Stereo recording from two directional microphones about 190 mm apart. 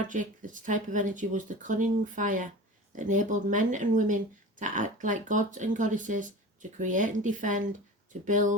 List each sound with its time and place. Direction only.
0.1 s speech: 45° right (ahead or behind)